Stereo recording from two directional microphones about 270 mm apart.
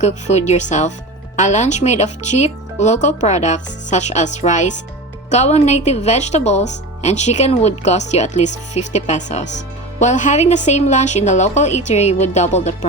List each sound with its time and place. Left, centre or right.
0.0 s speech: left